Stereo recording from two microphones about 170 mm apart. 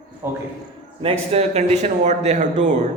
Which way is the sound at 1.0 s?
35° right (ahead or behind).